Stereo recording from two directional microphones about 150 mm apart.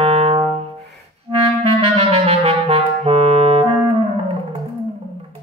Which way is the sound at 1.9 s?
40° right (ahead or behind).